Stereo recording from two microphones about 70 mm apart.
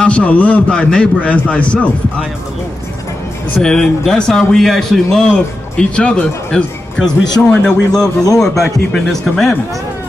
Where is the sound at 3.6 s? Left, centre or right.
Centre.